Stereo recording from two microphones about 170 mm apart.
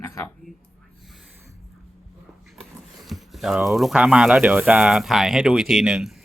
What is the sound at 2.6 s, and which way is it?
Speech, centre (ahead or behind).